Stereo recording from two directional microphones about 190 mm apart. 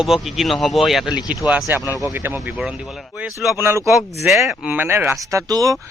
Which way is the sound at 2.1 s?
10° right (ahead or behind).